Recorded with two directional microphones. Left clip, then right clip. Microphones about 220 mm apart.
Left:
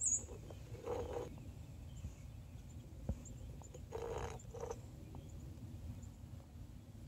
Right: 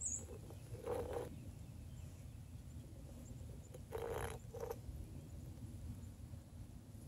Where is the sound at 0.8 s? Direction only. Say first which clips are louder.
Even; 5° right (ahead or behind).